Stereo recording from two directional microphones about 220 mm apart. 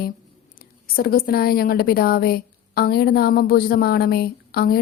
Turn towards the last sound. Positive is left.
turn(degrees=45)  # may be behind; listen again after turning